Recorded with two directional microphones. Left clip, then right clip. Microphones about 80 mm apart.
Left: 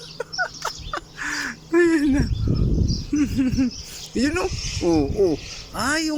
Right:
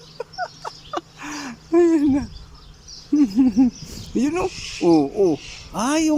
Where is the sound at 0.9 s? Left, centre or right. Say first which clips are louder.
Right 1 dB; right.